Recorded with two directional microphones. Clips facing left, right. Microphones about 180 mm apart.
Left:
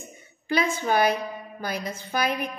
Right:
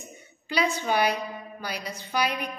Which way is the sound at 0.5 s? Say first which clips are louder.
Left 2 dB; 50° left (ahead or behind).